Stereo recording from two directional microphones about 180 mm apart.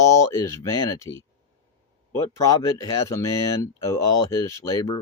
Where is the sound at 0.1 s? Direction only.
15° left (ahead or behind).